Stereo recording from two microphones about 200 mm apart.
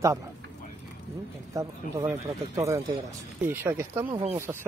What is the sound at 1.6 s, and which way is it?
Speech, 15° right (ahead or behind).